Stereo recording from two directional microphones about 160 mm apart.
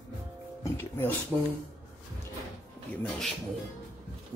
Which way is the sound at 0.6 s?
15° left (ahead or behind).